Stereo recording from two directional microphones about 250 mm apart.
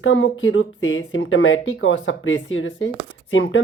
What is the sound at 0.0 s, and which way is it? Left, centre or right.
Speech, left.